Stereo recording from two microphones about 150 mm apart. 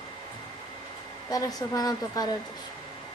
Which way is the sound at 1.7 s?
25° left (ahead or behind).